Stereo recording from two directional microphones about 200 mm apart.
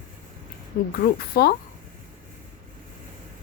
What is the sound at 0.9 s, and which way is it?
Speech, 50° left (ahead or behind).